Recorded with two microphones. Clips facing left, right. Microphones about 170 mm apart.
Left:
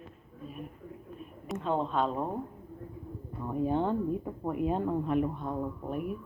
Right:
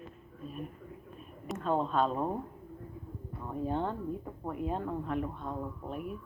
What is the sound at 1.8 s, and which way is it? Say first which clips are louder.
Speech: even; 15° left (ahead or behind).